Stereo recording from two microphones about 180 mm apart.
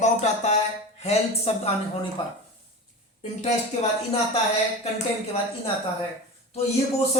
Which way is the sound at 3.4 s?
40° left (ahead or behind).